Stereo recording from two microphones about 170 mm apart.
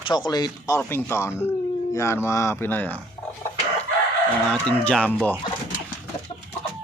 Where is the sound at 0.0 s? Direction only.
25° left (ahead or behind).